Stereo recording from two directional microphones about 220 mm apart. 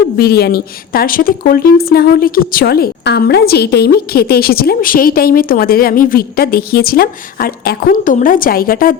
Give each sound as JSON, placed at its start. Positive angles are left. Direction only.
{"t": 0.2, "sound": "a woman's voice", "side_deg": 45}